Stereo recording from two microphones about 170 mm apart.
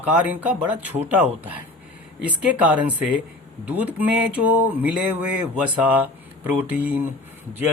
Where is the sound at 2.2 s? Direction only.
10° right (ahead or behind).